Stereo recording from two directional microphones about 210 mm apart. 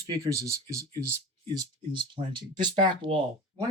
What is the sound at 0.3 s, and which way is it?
Speech, 15° right (ahead or behind).